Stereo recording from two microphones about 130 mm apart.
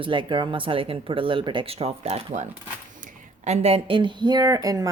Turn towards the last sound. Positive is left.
turn(degrees=-30)  # may be behind; listen again after turning